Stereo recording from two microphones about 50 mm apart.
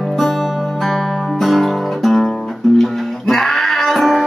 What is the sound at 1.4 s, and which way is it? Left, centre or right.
Guitar, centre.